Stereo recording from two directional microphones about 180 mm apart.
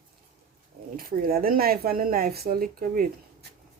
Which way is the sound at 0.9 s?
55° right (ahead or behind).